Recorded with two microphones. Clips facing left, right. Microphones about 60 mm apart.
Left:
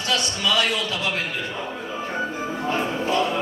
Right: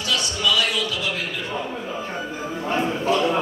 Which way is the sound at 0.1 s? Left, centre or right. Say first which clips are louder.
Even; left.